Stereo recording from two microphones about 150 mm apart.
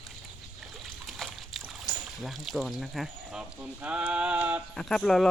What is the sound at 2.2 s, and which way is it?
Speech, centre (ahead or behind).